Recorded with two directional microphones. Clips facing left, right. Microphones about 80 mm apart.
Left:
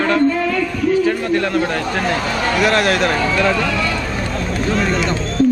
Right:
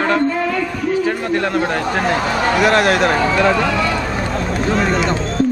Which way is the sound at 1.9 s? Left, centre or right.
Right.